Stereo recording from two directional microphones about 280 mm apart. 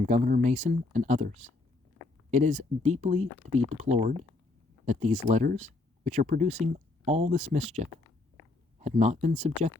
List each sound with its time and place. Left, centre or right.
0.0 s speech: right
8.8 s speech: right